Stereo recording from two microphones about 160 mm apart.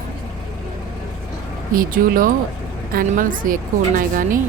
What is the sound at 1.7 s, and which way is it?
A woman's voice, 60° right (ahead or behind).